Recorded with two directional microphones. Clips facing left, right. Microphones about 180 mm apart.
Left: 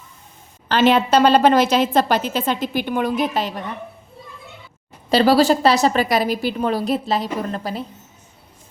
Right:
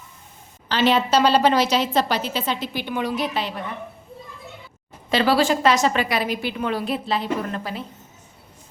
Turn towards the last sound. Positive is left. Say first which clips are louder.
# left 2 dB
turn(degrees=40)  # may be behind; listen again after turning